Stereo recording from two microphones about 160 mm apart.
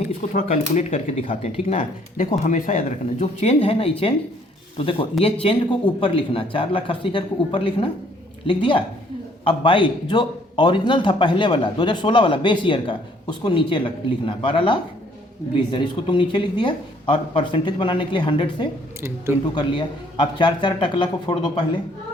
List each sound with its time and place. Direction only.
0.2 s a man's voice: 40° left (ahead or behind)
2.1 s a man's voice: 50° left (ahead or behind); by 18.7 s 30° left (ahead or behind)
19.0 s speech: 15° right (ahead or behind)
19.5 s a man's voice: 30° left (ahead or behind)